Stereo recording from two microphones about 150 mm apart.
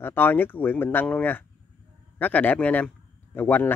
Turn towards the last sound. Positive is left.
turn(degrees=15)  # may be behind; listen again after turning